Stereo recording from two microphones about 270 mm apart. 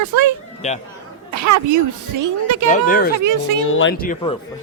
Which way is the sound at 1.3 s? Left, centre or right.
Right.